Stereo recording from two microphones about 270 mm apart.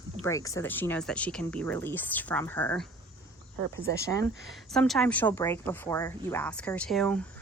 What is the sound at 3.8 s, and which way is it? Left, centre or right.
Speech, right.